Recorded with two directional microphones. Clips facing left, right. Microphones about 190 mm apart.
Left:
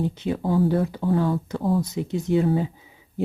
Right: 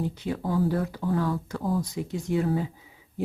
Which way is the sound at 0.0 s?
25° left (ahead or behind).